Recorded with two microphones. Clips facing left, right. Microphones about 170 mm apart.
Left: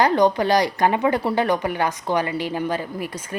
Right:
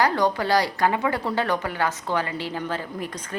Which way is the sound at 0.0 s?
20° left (ahead or behind).